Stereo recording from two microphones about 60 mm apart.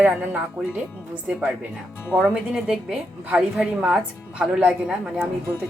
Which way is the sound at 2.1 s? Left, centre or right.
Right.